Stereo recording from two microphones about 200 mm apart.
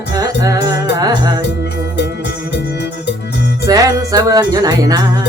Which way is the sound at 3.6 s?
15° right (ahead or behind).